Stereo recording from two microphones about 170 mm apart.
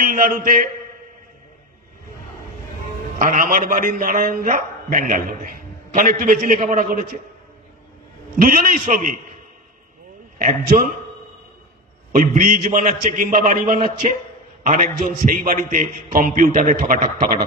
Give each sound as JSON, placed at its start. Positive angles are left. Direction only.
{"t": 0.0, "sound": "a man's voice", "side_deg": -55}
{"t": 3.2, "sound": "a man's voice", "side_deg": -55}
{"t": 8.4, "sound": "a man's voice", "side_deg": -55}
{"t": 10.3, "sound": "a man's voice", "side_deg": -50}
{"t": 12.1, "sound": "a man's voice", "side_deg": -50}